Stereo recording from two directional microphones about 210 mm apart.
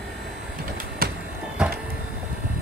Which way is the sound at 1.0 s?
45° right (ahead or behind).